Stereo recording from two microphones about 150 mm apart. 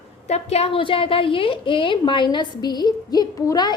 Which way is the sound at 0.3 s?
45° left (ahead or behind).